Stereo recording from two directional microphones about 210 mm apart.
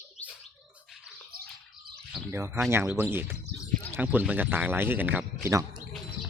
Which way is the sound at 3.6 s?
10° left (ahead or behind).